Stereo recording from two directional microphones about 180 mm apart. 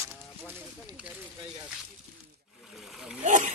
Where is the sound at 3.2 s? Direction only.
40° right (ahead or behind).